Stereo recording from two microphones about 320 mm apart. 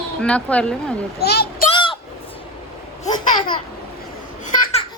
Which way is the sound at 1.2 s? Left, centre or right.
Left.